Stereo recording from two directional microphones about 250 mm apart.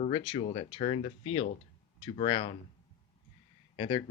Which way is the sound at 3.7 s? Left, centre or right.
Centre.